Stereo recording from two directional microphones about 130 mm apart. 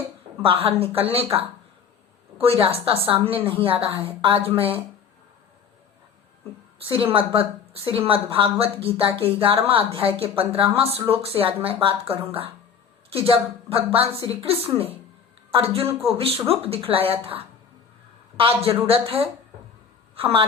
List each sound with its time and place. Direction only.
0.4 s speech: 45° right (ahead or behind)
6.9 s a woman's voice: 45° right (ahead or behind)